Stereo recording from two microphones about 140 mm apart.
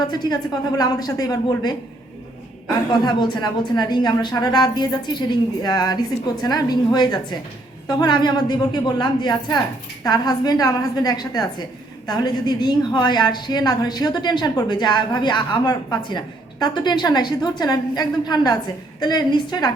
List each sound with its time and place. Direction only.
0.1 s a woman's voice: 30° left (ahead or behind)
3.0 s a woman's voice: 30° left (ahead or behind)